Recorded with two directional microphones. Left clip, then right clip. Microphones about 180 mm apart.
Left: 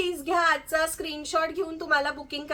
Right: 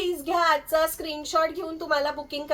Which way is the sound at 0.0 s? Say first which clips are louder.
Right 1 dB; 20° left (ahead or behind).